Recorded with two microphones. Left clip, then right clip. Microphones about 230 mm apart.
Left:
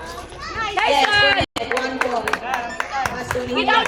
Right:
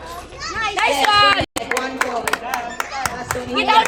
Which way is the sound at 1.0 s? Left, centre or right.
Right.